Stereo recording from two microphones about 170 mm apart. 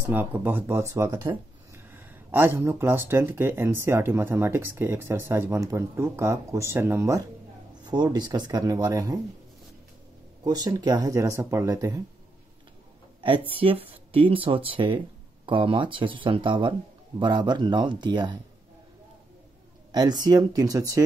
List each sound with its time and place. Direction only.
0.0 s speech: 10° right (ahead or behind)
10.4 s speech: 25° right (ahead or behind)
13.2 s speech: 30° right (ahead or behind)
19.9 s speech: 25° right (ahead or behind)